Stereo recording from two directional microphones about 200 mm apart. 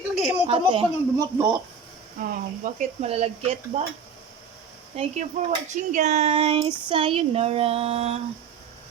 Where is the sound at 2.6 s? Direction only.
35° right (ahead or behind).